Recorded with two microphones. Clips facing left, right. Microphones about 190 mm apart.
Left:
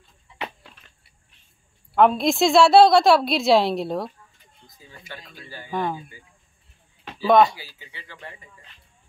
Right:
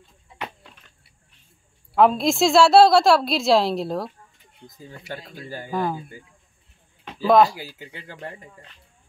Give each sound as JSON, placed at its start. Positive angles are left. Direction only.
{"t": 2.0, "sound": "a woman's voice", "side_deg": 0}
{"t": 4.6, "sound": "speech", "side_deg": -45}
{"t": 5.7, "sound": "a woman's voice", "side_deg": 0}
{"t": 7.1, "sound": "speech", "side_deg": 0}
{"t": 7.5, "sound": "speech", "side_deg": -45}